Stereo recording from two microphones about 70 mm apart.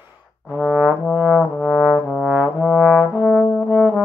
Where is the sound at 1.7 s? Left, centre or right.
Left.